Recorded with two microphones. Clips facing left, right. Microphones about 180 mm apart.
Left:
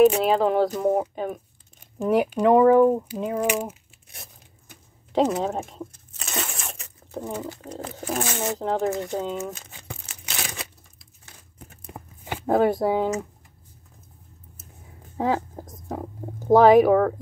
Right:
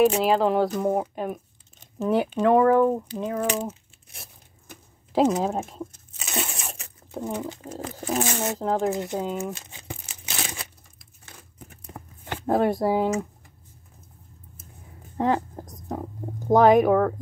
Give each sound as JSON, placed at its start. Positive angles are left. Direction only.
{"t": 0.0, "sound": "speech", "side_deg": 0}
{"t": 2.0, "sound": "speech", "side_deg": 15}
{"t": 5.1, "sound": "a sound", "side_deg": -5}
{"t": 7.3, "sound": "speech", "side_deg": -20}
{"t": 7.6, "sound": "speech", "side_deg": -5}
{"t": 8.9, "sound": "speech", "side_deg": -15}
{"t": 11.8, "sound": "a sound", "side_deg": 10}
{"t": 12.4, "sound": "speech", "side_deg": 0}
{"t": 15.1, "sound": "a sound", "side_deg": 0}
{"t": 16.4, "sound": "speech", "side_deg": 0}